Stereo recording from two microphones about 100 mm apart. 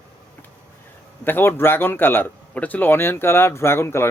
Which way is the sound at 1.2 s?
20° left (ahead or behind).